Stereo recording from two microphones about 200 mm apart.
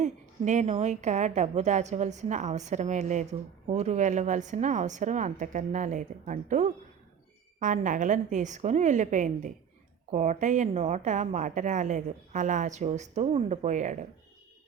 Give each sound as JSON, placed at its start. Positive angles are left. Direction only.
{"t": 0.0, "sound": "a woman's voice", "side_deg": -35}